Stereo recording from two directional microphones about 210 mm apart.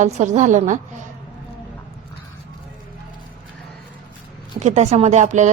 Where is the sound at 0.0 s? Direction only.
35° right (ahead or behind).